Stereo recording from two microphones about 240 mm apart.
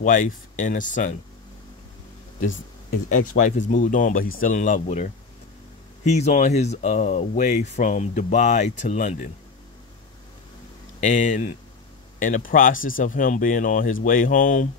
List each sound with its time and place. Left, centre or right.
0.0 s speech: left
3.3 s speech: left
11.0 s speech: left